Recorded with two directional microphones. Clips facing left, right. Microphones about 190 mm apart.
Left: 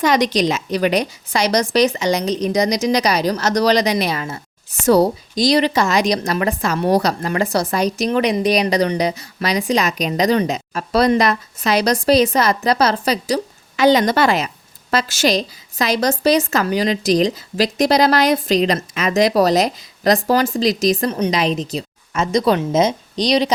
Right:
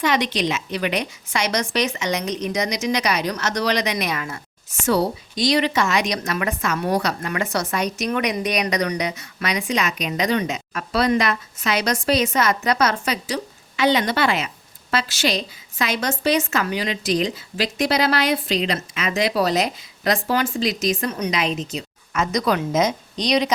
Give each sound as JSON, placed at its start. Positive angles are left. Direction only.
{"t": 0.0, "sound": "a woman's voice", "side_deg": 40}